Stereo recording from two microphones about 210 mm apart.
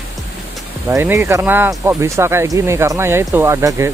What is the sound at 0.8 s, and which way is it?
Speech, 15° right (ahead or behind).